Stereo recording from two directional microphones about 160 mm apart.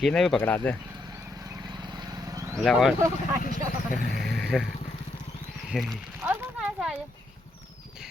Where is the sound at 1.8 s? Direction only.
25° right (ahead or behind).